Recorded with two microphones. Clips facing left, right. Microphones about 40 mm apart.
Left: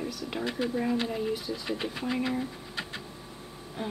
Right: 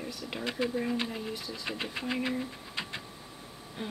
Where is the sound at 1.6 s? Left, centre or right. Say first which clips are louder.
Left 1 dB; right.